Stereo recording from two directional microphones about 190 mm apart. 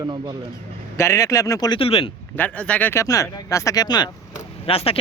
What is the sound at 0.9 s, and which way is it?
Speech, 15° left (ahead or behind).